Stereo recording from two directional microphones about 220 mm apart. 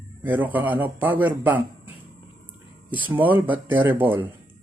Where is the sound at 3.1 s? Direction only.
10° right (ahead or behind).